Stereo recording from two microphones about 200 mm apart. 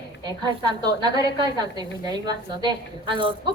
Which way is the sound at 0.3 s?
20° right (ahead or behind).